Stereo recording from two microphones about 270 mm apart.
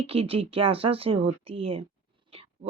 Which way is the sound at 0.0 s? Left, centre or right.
Right.